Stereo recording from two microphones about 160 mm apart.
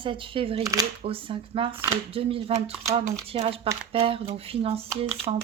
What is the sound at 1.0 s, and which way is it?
Speech, 35° right (ahead or behind).